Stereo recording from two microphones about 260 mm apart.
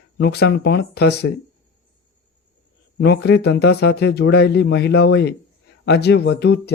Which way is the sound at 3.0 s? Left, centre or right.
Left.